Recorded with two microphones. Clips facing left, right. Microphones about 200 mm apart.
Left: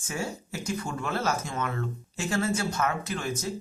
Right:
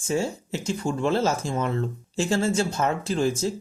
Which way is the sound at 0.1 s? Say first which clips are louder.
Right 7 dB; 25° right (ahead or behind).